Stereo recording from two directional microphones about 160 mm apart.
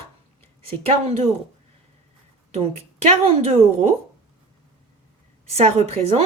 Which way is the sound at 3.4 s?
40° right (ahead or behind).